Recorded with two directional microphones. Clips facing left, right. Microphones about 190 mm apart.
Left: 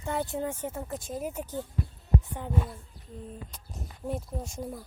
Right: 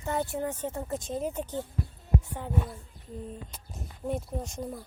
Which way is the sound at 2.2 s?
20° left (ahead or behind).